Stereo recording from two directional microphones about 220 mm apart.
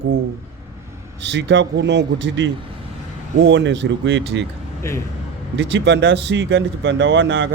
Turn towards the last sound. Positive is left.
turn(degrees=-55)  # may be behind; listen again after turning